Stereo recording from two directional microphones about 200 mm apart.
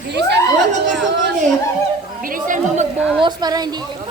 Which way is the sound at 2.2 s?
40° right (ahead or behind).